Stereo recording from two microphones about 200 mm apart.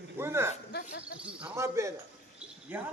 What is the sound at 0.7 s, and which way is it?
Dog, 55° left (ahead or behind).